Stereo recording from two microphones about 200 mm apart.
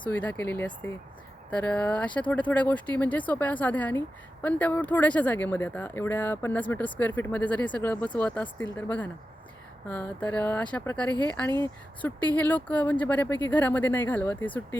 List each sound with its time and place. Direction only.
0.1 s speech: 10° left (ahead or behind)